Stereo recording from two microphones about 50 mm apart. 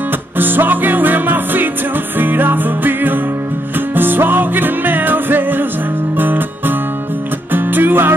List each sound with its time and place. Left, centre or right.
0.4 s music: right
7.5 s music: right